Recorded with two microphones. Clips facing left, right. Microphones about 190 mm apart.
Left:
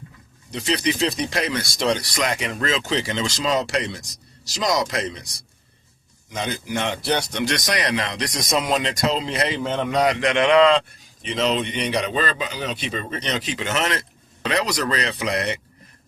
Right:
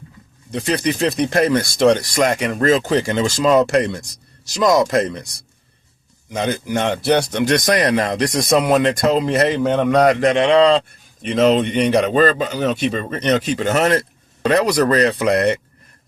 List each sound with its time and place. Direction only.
0.5 s speech: 55° right (ahead or behind)
10.3 s a man's voice: 30° right (ahead or behind)
11.2 s speech: 50° right (ahead or behind)